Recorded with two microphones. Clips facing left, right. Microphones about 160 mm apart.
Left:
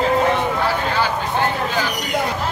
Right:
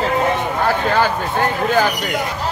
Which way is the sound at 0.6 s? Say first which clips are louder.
Right 4 dB; 50° right (ahead or behind).